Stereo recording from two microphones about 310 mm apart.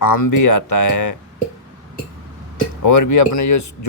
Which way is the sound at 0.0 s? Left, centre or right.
Left.